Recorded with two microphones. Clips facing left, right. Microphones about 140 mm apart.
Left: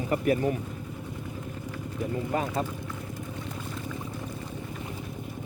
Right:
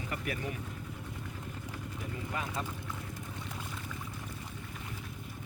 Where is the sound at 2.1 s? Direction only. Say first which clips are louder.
Left 10 dB; 40° left (ahead or behind).